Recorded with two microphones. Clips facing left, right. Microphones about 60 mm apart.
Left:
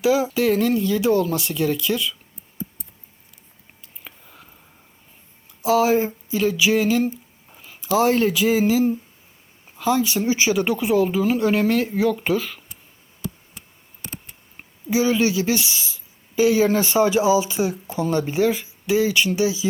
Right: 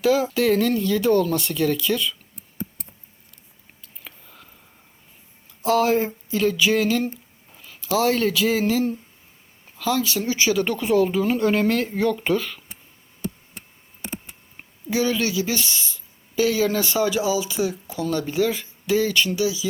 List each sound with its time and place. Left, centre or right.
0.0 s speech: centre
2.6 s a sound: right
4.0 s whispering: centre
5.6 s a sound: centre
7.5 s a sound: centre
9.6 s speech: left
10.8 s speech: centre
14.8 s speech: centre
15.5 s speech: centre
19.3 s speech: left